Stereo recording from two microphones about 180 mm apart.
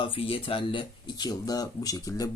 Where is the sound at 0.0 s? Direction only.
30° left (ahead or behind).